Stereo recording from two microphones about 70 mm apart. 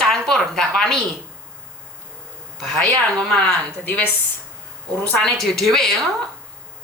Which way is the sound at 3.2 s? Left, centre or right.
Centre.